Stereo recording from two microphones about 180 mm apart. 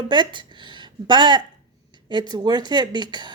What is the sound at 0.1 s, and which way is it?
Speech, 25° right (ahead or behind).